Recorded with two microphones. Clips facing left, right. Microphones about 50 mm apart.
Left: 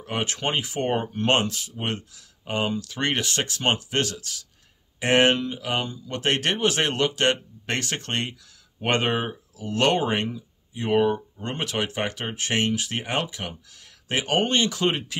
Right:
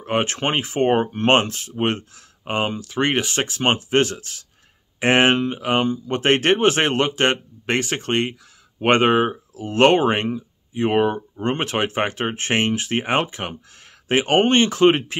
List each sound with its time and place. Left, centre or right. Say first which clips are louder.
0.0 s speech: right 6 dB; right